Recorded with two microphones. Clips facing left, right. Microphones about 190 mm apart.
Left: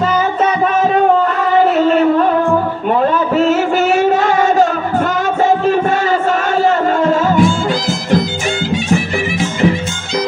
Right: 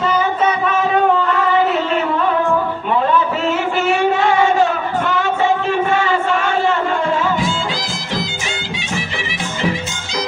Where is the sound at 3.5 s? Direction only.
40° left (ahead or behind).